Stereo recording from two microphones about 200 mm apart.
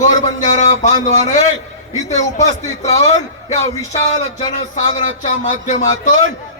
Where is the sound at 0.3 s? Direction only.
35° left (ahead or behind).